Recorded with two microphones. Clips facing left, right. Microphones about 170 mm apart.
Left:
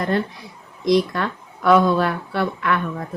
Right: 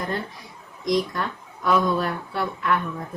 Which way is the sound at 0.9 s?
70° left (ahead or behind).